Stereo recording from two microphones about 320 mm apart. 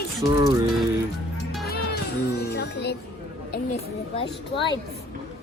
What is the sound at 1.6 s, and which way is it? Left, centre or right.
Music, left.